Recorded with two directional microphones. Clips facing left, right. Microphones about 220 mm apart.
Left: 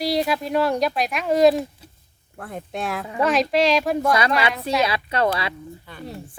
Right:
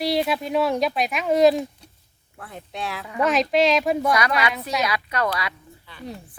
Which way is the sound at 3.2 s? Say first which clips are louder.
Even; centre (ahead or behind).